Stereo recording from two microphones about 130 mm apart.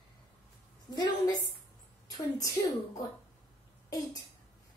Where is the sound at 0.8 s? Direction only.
30° left (ahead or behind).